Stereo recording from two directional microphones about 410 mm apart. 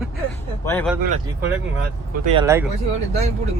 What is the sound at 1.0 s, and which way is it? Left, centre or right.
Speech, centre.